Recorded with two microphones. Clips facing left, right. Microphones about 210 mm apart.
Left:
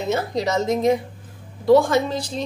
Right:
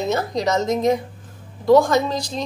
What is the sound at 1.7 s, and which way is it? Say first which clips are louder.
Speech: right 1 dB; 40° right (ahead or behind).